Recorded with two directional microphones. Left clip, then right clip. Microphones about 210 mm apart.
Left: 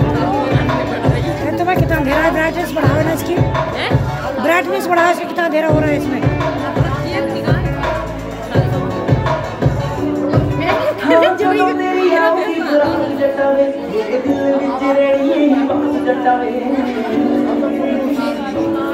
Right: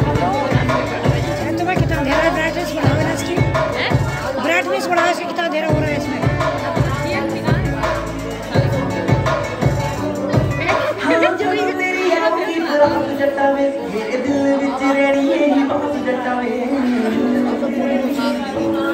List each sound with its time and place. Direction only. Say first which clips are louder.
4.5 s music: left 3 dB; 30° left (ahead or behind)
11.1 s music: left 5 dB; 45° left (ahead or behind)